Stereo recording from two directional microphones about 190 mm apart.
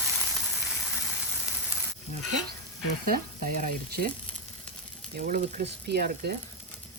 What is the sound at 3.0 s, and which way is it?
Frying, 45° right (ahead or behind).